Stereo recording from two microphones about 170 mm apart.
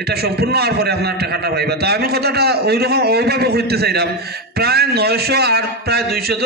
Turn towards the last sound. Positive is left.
turn(degrees=-70)  # may be behind; listen again after turning